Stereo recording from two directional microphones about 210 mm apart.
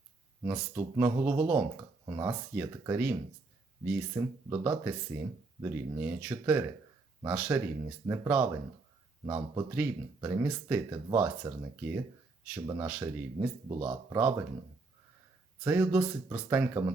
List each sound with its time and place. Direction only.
0.4 s speech: 10° right (ahead or behind)
12.9 s speech: 5° right (ahead or behind)
13.7 s speech: 20° right (ahead or behind)
15.6 s speech: 10° right (ahead or behind)